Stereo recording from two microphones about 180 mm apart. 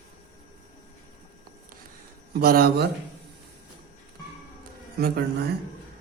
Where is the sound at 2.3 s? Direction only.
55° right (ahead or behind).